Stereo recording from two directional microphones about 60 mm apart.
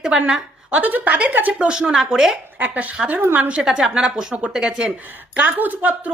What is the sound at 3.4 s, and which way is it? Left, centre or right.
A woman's voice, centre.